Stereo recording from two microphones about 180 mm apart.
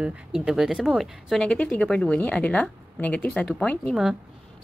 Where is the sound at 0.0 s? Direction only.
5° right (ahead or behind).